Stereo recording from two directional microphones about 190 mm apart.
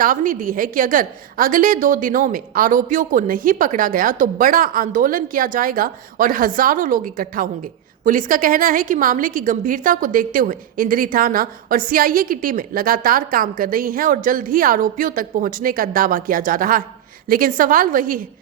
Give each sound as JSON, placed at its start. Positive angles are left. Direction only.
{"t": 0.0, "sound": "a woman's voice", "side_deg": -45}